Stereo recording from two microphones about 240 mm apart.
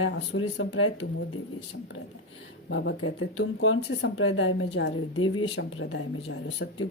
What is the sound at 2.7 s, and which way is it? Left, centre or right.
Speech, left.